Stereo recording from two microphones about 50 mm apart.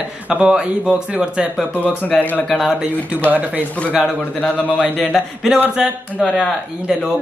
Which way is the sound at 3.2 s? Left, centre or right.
Right.